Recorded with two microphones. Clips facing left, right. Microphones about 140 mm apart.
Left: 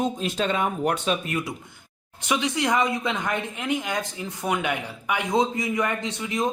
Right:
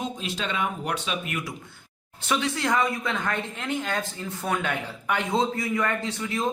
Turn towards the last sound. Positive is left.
turn(degrees=15)  # may be behind; listen again after turning